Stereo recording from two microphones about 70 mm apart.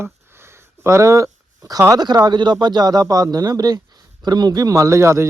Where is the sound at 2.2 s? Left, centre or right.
Right.